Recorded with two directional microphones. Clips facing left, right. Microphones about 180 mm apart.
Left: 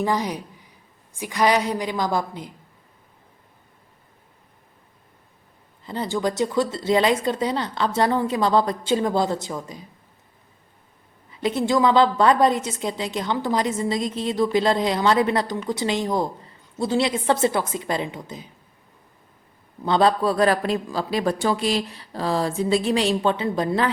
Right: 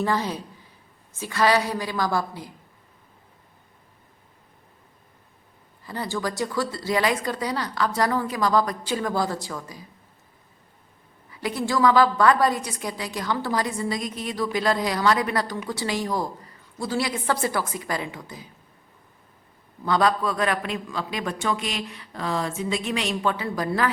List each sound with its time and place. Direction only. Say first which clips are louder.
0.0 s a woman's voice: left 2 dB; 15° left (ahead or behind)
5.8 s a woman's voice: left 4 dB; 20° left (ahead or behind)
11.3 s a woman's voice: left 5 dB; 25° left (ahead or behind)
19.8 s a man's voice: left 3 dB; 25° left (ahead or behind)